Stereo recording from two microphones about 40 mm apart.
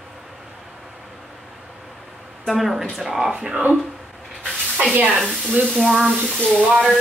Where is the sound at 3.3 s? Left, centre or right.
Centre.